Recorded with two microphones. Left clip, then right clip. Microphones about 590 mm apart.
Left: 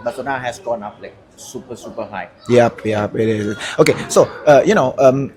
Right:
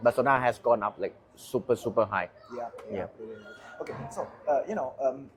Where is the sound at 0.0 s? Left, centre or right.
Right.